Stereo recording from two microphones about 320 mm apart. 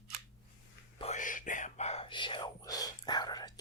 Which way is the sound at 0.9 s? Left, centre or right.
Left.